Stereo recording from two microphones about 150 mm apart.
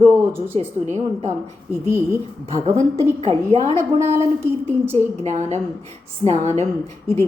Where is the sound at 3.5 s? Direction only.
45° right (ahead or behind).